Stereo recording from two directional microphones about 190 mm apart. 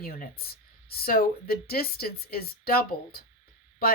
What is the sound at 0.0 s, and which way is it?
Speech, 50° left (ahead or behind).